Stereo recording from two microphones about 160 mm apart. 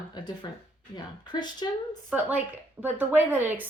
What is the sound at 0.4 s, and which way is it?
Speech, 25° left (ahead or behind).